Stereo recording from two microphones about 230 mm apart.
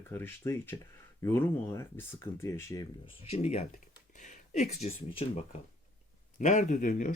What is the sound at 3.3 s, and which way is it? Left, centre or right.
Speech, left.